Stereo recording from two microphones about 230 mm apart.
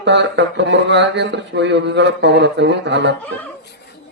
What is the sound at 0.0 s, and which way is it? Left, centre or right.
Speech, right.